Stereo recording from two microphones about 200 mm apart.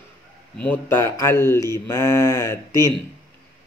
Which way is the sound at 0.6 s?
10° left (ahead or behind).